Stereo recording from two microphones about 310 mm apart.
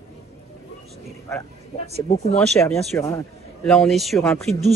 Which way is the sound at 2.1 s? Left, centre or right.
Centre.